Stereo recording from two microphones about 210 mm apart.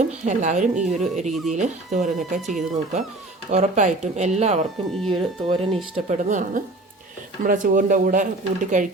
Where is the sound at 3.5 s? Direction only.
35° right (ahead or behind).